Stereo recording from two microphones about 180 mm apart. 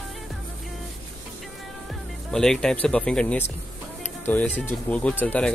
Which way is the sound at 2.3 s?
5° left (ahead or behind).